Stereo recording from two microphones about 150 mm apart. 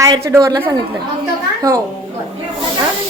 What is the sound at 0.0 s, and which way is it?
Speech, 25° right (ahead or behind).